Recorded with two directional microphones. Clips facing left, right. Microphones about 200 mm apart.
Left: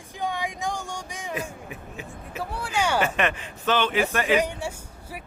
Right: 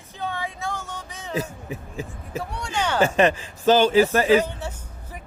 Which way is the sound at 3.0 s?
30° right (ahead or behind).